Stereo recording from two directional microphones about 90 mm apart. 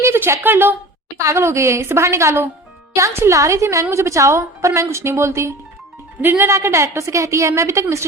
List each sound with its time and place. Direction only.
0.0 s a woman's voice: 25° right (ahead or behind)